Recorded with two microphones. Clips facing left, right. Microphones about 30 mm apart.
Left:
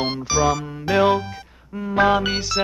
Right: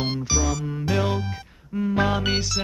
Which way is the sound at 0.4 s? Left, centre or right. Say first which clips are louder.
Left 6 dB; left.